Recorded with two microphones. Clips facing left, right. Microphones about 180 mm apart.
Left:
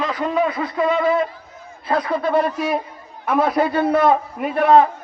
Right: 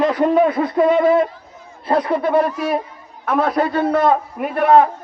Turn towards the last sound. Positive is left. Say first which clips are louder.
# right 1 dB
turn(degrees=-5)  # may be behind; listen again after turning